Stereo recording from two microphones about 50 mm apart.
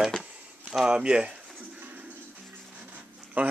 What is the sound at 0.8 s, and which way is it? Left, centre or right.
Speech, centre.